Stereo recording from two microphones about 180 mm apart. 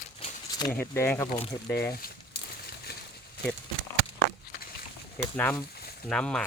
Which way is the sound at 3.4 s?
60° left (ahead or behind).